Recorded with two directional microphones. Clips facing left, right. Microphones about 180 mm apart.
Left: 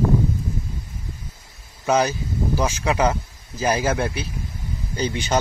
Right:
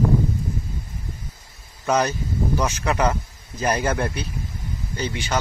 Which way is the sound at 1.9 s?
10° left (ahead or behind).